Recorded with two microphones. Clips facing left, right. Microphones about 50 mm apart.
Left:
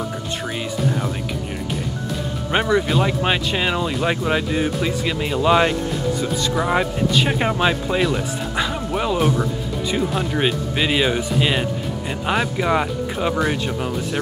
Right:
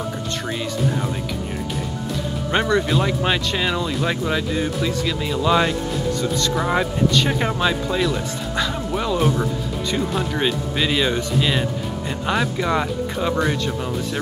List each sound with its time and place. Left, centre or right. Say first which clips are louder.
2.5 s speech: left 1 dB; centre
6.4 s speech: left 2 dB; centre